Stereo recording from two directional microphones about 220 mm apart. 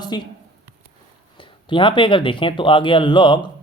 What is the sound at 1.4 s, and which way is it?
Speech, 20° left (ahead or behind).